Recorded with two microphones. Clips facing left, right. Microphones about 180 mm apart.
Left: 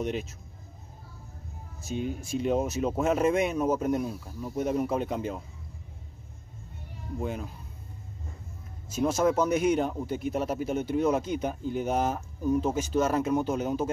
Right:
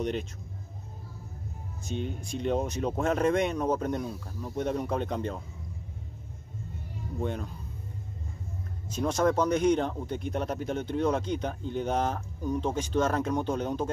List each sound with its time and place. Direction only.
0.0 s speech: 5° left (ahead or behind)
1.8 s speech: 5° left (ahead or behind)
7.2 s speech: 5° left (ahead or behind)
8.9 s speech: 5° left (ahead or behind)